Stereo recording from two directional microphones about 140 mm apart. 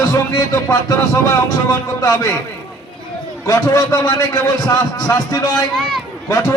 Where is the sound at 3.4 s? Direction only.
25° left (ahead or behind).